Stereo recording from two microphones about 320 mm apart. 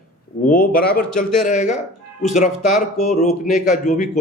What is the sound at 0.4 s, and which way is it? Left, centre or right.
Speech, left.